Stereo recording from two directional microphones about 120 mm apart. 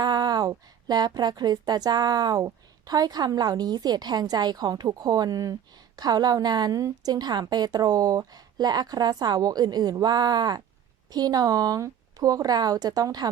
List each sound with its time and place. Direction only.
0.0 s a woman's voice: 35° right (ahead or behind)